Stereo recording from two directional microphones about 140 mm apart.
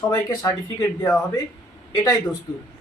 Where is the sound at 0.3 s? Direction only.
25° left (ahead or behind).